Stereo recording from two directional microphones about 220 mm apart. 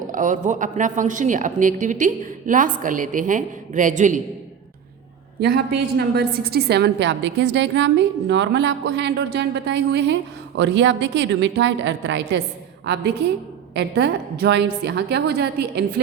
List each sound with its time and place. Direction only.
0.1 s a woman's voice: 35° right (ahead or behind)
5.4 s a woman's voice: 45° right (ahead or behind)
13.7 s a woman's voice: 50° right (ahead or behind)